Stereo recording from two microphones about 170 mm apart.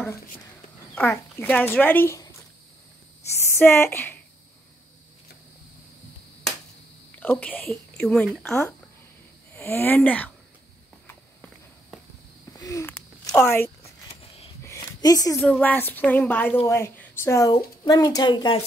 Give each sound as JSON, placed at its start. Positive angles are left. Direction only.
{"t": 0.9, "sound": "speech", "side_deg": 10}
{"t": 3.4, "sound": "speech", "side_deg": 15}
{"t": 7.2, "sound": "speech", "side_deg": 10}
{"t": 9.5, "sound": "speech", "side_deg": 15}
{"t": 12.5, "sound": "a sound", "side_deg": 20}
{"t": 15.4, "sound": "a woman's voice", "side_deg": 5}